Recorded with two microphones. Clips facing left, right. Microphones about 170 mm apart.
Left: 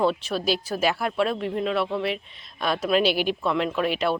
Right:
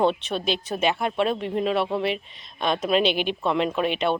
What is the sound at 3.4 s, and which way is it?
Speech, 25° right (ahead or behind).